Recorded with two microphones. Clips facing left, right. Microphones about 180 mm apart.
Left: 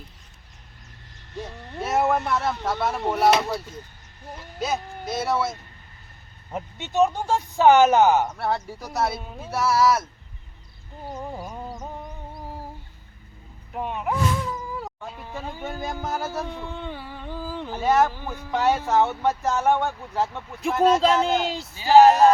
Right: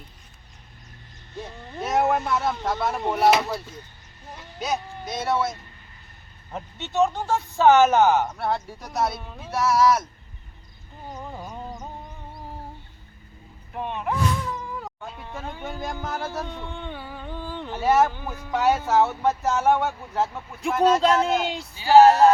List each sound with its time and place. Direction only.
1.7 s speech: centre (ahead or behind)
4.6 s speech: centre (ahead or behind)
11.3 s a sound: 10° left (ahead or behind)
13.7 s speech: 5° left (ahead or behind)
21.8 s speech: 15° left (ahead or behind)